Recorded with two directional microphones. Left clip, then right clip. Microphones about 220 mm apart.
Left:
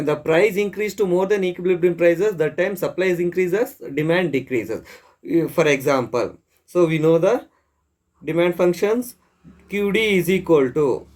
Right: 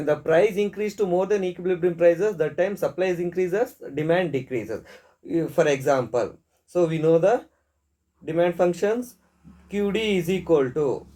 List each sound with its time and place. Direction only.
0.0 s speech: 45° left (ahead or behind)